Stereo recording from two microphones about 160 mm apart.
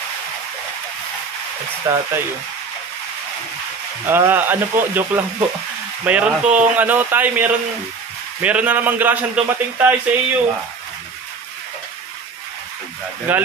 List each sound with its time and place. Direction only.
1.9 s a man's voice: 20° right (ahead or behind)
4.1 s a man's voice: 15° right (ahead or behind)
13.3 s a man's voice: 10° right (ahead or behind)